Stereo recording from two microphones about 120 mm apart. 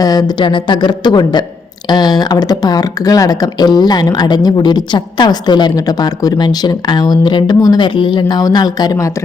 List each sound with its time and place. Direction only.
0.0 s speech: 30° left (ahead or behind)